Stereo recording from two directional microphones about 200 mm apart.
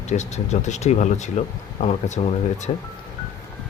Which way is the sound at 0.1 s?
35° left (ahead or behind).